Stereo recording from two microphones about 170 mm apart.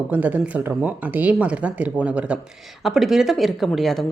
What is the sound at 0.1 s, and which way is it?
A woman's voice, 10° right (ahead or behind).